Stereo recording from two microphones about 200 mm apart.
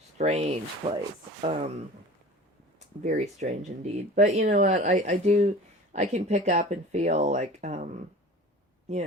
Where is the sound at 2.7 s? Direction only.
35° right (ahead or behind).